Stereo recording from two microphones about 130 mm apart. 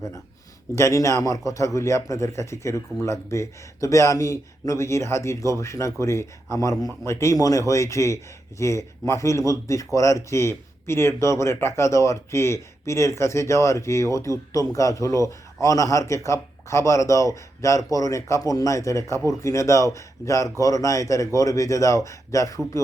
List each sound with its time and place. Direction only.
0.8 s a man's voice: 25° left (ahead or behind)